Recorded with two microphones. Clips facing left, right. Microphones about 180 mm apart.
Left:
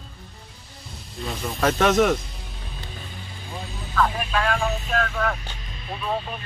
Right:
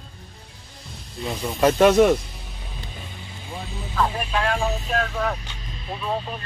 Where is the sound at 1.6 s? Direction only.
10° right (ahead or behind).